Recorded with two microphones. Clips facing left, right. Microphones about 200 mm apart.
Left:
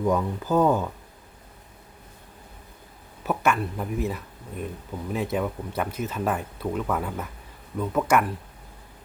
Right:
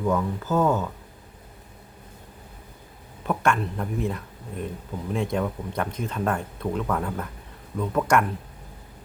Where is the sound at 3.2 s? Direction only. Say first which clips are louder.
Even; 5° left (ahead or behind).